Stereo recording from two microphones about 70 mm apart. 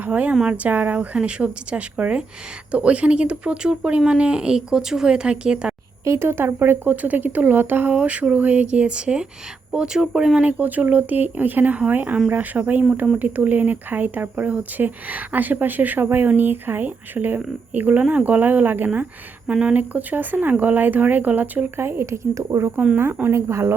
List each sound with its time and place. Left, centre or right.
0.0 s speech: right
6.1 s speech: right; by 10.4 s centre
10.4 s speech: right
19.5 s speech: centre
21.8 s speech: right
22.7 s speech: centre
23.3 s speech: right